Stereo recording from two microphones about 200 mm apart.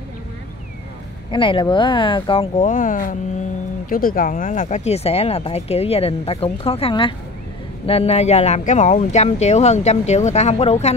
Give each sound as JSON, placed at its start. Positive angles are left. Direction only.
{"t": 1.3, "sound": "speech", "side_deg": 25}